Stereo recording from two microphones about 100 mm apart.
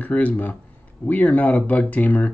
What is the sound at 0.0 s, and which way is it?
Speech, 15° left (ahead or behind).